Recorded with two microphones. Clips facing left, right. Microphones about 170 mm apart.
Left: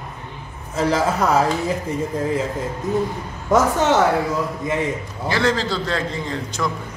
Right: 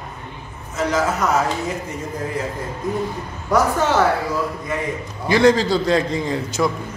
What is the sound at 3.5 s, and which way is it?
Speech, 20° left (ahead or behind).